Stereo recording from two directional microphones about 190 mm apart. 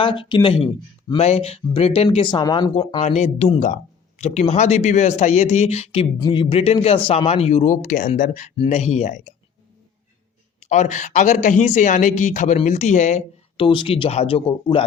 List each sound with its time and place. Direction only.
0.0 s speech: 25° left (ahead or behind); by 8.5 s 40° left (ahead or behind)
8.5 s speech: 30° left (ahead or behind)
10.6 s speech: 40° left (ahead or behind)